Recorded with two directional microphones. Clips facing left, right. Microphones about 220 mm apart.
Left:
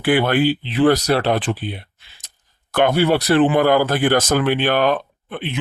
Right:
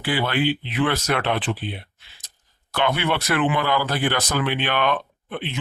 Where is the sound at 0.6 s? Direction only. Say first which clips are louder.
Left 7 dB; 35° left (ahead or behind).